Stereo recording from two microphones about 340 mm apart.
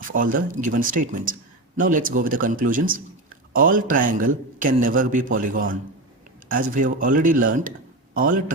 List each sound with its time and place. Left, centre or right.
0.1 s speech: right